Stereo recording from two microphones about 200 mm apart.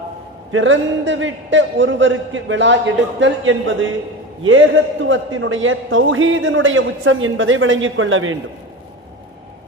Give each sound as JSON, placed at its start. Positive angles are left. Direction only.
{"t": 0.5, "sound": "a man's voice", "side_deg": -70}